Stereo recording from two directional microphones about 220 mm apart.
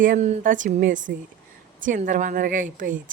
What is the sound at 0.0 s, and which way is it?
Speech, 35° right (ahead or behind).